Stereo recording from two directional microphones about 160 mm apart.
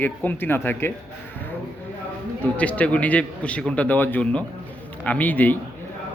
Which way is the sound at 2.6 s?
10° left (ahead or behind).